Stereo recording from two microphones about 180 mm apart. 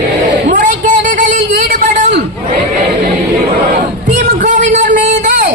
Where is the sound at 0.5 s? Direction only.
45° right (ahead or behind).